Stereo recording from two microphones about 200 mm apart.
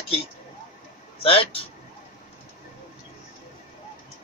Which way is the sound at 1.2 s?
25° left (ahead or behind).